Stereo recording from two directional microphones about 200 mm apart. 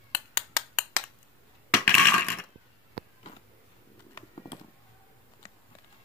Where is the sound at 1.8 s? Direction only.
10° left (ahead or behind).